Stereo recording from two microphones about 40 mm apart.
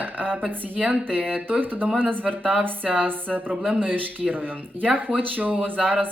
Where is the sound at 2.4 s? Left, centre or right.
Right.